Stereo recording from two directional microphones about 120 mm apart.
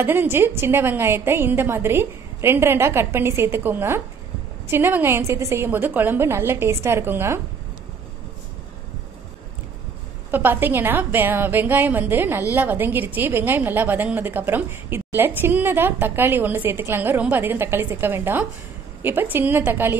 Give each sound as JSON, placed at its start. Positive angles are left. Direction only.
{"t": 0.0, "sound": "a woman's voice", "side_deg": -15}
{"t": 10.3, "sound": "a woman's voice", "side_deg": -15}